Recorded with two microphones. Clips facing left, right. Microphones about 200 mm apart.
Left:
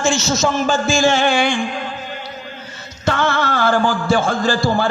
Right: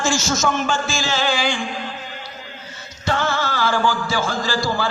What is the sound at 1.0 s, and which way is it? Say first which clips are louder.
Speech: left 7 dB; 55° left (ahead or behind).